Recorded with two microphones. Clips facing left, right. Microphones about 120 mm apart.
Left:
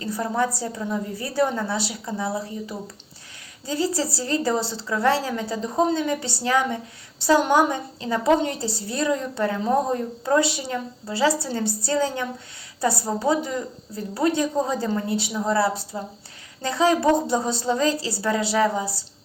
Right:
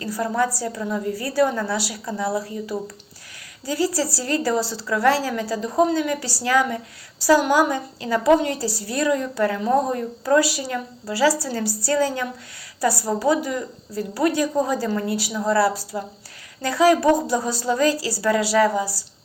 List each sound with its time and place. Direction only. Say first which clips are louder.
0.0 s a woman's voice: right 2 dB; 20° left (ahead or behind)